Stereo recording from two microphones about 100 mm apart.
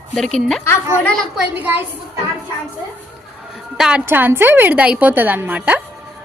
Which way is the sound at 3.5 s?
5° right (ahead or behind).